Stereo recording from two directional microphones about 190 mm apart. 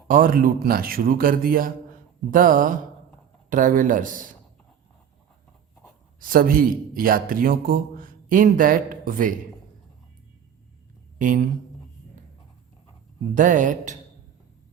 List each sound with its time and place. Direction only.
0.1 s speech: 45° right (ahead or behind)
6.1 s speech: 50° right (ahead or behind)
11.2 s speech: 45° right (ahead or behind)
13.3 s speech: 45° right (ahead or behind)